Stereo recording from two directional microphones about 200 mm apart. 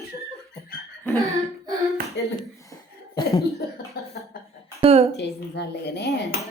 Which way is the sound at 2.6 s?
15° left (ahead or behind).